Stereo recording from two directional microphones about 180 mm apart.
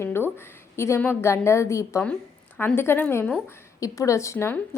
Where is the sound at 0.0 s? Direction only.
15° left (ahead or behind).